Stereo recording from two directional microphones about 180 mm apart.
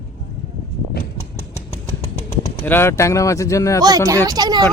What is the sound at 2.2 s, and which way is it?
Speech, 15° left (ahead or behind).